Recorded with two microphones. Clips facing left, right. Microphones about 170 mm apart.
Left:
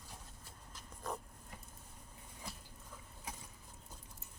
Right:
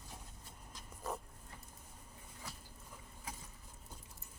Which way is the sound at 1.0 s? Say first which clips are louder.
Even; 5° right (ahead or behind).